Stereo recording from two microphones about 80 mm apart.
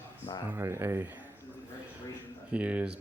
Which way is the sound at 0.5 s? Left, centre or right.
Right.